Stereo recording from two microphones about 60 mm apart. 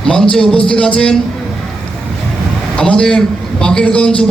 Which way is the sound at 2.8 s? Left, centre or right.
Centre.